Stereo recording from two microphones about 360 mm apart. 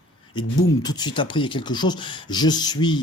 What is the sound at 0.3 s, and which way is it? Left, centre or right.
Speech, centre.